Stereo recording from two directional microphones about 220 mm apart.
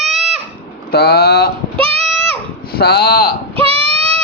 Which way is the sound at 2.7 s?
45° left (ahead or behind).